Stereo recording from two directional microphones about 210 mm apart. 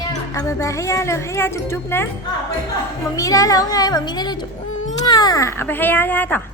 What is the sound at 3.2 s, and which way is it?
Speech, 15° left (ahead or behind).